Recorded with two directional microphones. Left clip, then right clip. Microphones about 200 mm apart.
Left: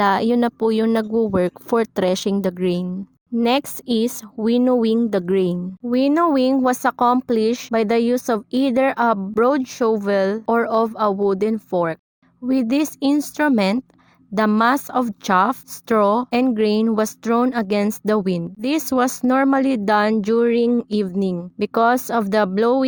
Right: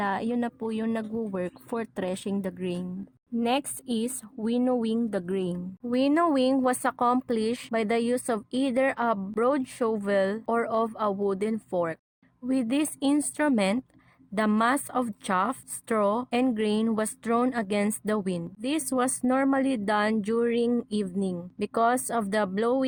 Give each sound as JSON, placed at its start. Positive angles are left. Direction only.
{"t": 0.0, "sound": "speech", "side_deg": 40}